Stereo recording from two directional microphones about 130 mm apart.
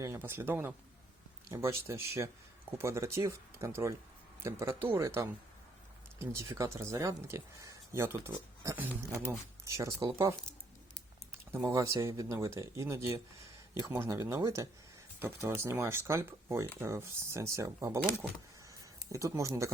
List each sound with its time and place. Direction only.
0.0 s speech: 20° right (ahead or behind)
11.5 s speech: 20° right (ahead or behind)